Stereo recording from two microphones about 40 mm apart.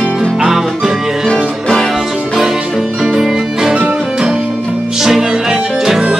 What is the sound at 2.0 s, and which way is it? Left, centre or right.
Music, centre.